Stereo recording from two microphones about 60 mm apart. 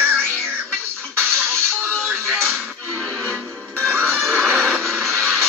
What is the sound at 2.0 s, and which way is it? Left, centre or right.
Music, right.